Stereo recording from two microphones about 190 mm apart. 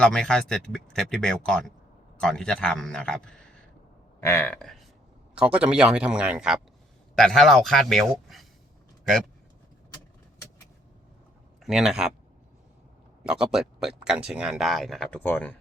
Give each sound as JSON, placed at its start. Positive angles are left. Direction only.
{"t": 0.0, "sound": "speech", "side_deg": 5}
{"t": 11.6, "sound": "speech", "side_deg": 0}
{"t": 13.2, "sound": "speech", "side_deg": 0}